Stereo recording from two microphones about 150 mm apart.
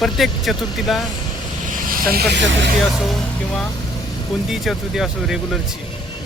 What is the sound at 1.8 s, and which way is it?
Vehicle, 70° right (ahead or behind).